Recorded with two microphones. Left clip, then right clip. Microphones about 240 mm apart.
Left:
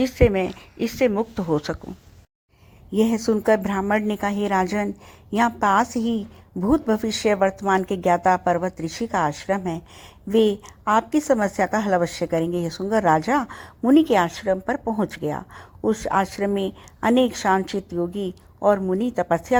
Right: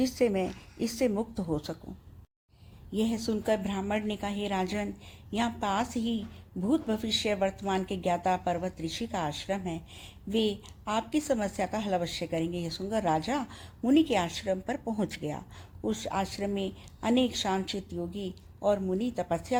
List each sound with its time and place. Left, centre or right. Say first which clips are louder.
0.0 s a woman's voice: left 9 dB; centre
1.5 s a woman's voice: left 10 dB; left
3.2 s a woman's voice: left 10 dB; left
10.8 s a woman's voice: left 10 dB; left